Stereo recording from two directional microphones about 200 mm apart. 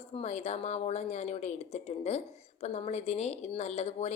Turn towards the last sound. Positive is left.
turn(degrees=35)  # may be behind; listen again after turning